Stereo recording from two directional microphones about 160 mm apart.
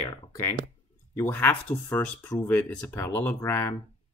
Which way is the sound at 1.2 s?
10° left (ahead or behind).